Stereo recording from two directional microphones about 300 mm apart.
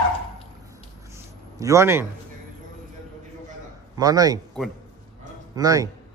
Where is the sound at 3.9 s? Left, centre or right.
Centre.